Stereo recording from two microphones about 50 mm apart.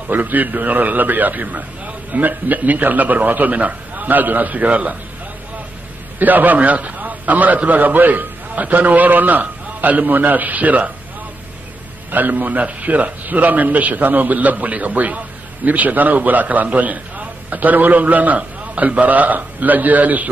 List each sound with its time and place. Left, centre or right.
0.1 s a man's voice: right
6.1 s a man's voice: right
12.1 s a man's voice: right